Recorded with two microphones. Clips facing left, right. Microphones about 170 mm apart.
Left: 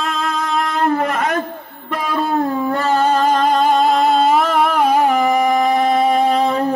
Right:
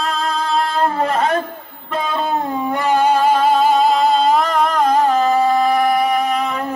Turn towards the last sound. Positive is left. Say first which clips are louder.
# left 4 dB
turn(degrees=30)  # may be behind; listen again after turning